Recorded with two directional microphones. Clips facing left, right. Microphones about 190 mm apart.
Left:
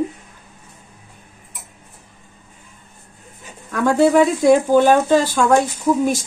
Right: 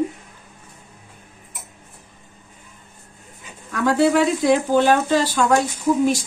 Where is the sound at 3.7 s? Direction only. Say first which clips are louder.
Left 3 dB; 50° left (ahead or behind).